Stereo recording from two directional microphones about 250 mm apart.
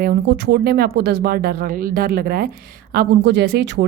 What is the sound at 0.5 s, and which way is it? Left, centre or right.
A woman's voice, right.